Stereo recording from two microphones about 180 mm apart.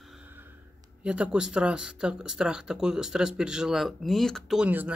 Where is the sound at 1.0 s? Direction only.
5° right (ahead or behind).